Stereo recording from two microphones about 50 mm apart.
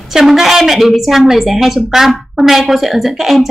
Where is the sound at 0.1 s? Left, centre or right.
Centre.